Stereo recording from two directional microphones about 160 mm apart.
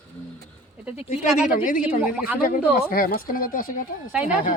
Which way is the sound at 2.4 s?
65° left (ahead or behind).